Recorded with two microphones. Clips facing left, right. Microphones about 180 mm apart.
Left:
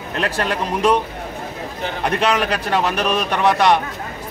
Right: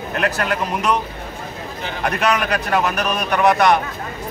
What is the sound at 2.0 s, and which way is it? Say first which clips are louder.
Speech: left 1 dB; 30° left (ahead or behind).